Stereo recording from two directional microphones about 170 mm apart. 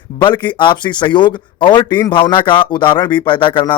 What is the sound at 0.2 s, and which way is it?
Speech, 25° left (ahead or behind).